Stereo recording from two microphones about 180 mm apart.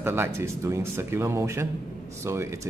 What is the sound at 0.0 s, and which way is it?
Speech, 15° right (ahead or behind).